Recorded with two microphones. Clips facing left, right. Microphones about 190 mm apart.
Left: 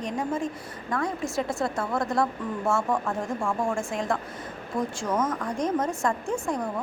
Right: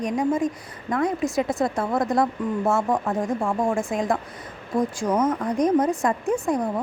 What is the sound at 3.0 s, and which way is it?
Speech, 35° right (ahead or behind).